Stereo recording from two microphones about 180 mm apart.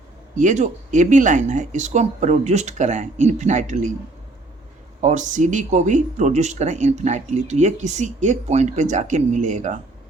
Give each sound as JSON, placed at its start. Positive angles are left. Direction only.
{"t": 0.3, "sound": "speech", "side_deg": -40}
{"t": 4.9, "sound": "speech", "side_deg": -40}